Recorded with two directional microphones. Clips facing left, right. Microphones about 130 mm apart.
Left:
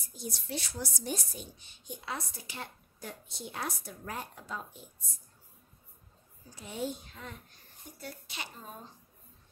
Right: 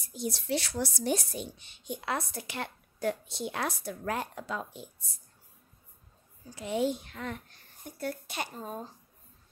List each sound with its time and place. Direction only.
0.0 s a woman's voice: 75° right (ahead or behind)
6.5 s a woman's voice: 80° right
8.0 s speech: 55° right (ahead or behind)